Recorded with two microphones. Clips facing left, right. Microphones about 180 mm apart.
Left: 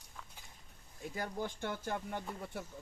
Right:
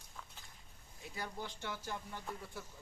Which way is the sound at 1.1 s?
50° left (ahead or behind).